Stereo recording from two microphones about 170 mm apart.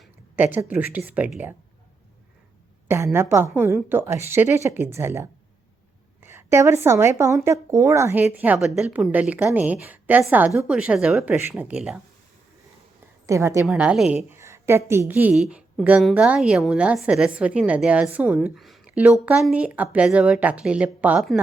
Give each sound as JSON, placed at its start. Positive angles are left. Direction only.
{"t": 0.3, "sound": "a woman's voice", "side_deg": -10}
{"t": 2.8, "sound": "a woman's voice", "side_deg": -15}
{"t": 13.2, "sound": "a woman's voice", "side_deg": -15}
{"t": 13.7, "sound": "a woman's voice", "side_deg": -5}
{"t": 14.3, "sound": "a woman's voice", "side_deg": -15}